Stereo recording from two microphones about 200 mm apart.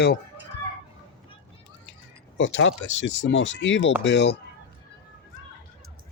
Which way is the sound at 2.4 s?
65° left (ahead or behind).